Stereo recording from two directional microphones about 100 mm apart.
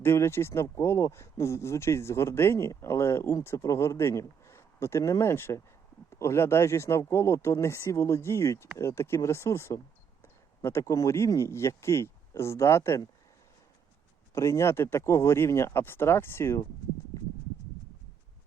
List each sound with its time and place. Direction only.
0.0 s speech: 25° left (ahead or behind)
14.3 s speech: 25° left (ahead or behind)